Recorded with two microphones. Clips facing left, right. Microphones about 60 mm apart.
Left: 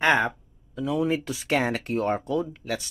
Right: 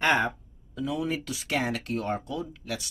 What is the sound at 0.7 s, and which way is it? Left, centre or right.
Speech, centre.